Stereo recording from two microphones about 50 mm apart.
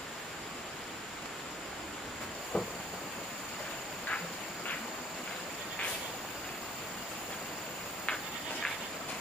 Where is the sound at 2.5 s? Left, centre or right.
Left.